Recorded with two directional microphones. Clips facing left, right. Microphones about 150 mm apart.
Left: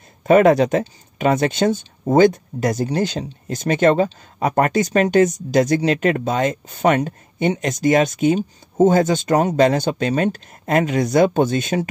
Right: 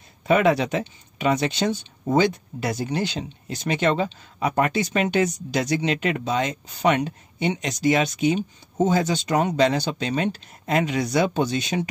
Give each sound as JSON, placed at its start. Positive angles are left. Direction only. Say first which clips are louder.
{"t": 0.3, "sound": "speech", "louder": "left 6 dB", "side_deg": 45}